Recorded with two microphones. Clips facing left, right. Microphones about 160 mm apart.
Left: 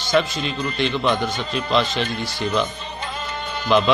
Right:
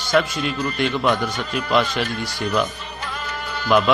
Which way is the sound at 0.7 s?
10° right (ahead or behind).